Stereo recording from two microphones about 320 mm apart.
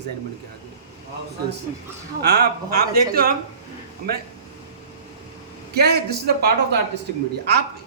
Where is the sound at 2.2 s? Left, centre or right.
Right.